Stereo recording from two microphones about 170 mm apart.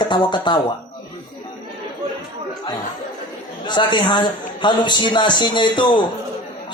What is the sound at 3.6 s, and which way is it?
Speech, 25° left (ahead or behind).